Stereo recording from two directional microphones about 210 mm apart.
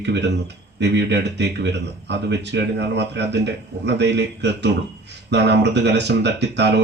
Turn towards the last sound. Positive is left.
turn(degrees=-55)  # may be behind; listen again after turning